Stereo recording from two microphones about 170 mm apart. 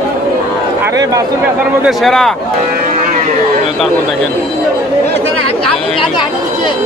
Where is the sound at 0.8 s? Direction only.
20° right (ahead or behind).